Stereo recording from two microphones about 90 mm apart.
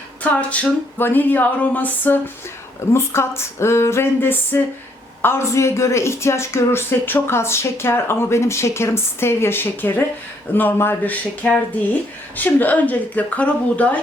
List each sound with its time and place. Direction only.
0.2 s a woman's voice: 15° left (ahead or behind)